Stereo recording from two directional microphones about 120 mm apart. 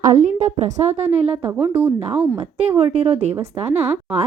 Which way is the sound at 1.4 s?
15° right (ahead or behind).